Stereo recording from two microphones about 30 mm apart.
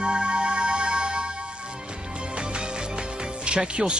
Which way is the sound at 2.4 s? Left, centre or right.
Right.